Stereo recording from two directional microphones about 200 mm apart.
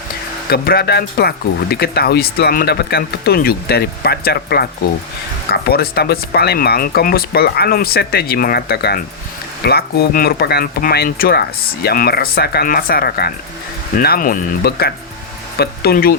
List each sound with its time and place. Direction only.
0.5 s speech: 50° left (ahead or behind)